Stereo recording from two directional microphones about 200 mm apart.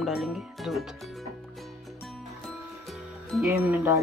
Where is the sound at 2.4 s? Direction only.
Centre (ahead or behind).